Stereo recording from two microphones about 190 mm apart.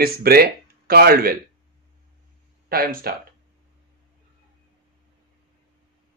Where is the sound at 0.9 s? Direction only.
55° right (ahead or behind).